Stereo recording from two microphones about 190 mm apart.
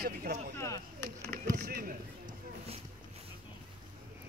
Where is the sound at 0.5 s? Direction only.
15° left (ahead or behind).